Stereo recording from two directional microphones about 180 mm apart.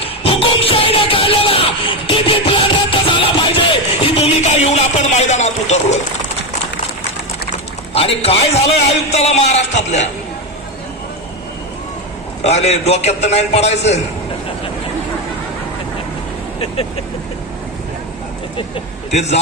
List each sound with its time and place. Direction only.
0.0 s music: 30° left (ahead or behind)
7.9 s a man's voice: 30° left (ahead or behind)
12.4 s a man's voice: 35° left (ahead or behind)
19.1 s a man's voice: 35° left (ahead or behind)